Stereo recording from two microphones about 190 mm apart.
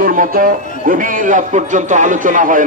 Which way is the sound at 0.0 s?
45° right (ahead or behind).